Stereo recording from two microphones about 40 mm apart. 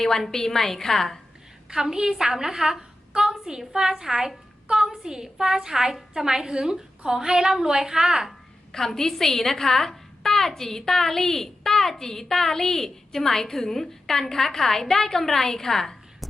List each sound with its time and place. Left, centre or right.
0.0 s a woman's voice: centre
1.7 s a woman's voice: centre
3.2 s a sound: centre
3.6 s a woman's voice: centre
8.7 s a woman's voice: centre